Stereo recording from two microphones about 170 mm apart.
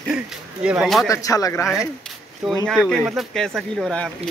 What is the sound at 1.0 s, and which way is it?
Speech, 20° left (ahead or behind).